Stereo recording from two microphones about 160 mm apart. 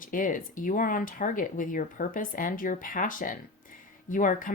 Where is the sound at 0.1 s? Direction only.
55° left (ahead or behind).